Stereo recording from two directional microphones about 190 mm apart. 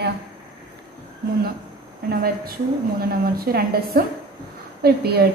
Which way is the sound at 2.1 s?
50° right (ahead or behind).